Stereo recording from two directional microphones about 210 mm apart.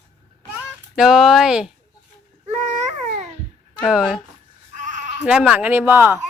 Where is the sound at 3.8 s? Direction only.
5° right (ahead or behind).